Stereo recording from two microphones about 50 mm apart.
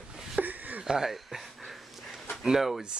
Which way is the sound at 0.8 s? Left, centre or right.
Centre.